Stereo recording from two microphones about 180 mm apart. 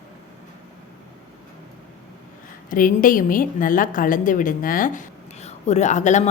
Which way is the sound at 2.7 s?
50° left (ahead or behind).